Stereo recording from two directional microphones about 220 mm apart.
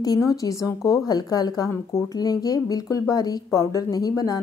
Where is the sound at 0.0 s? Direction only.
15° left (ahead or behind).